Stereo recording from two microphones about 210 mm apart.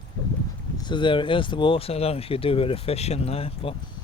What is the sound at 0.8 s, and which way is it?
Speech, 20° left (ahead or behind).